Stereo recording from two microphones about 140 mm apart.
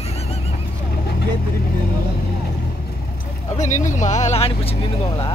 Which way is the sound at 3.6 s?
60° left (ahead or behind).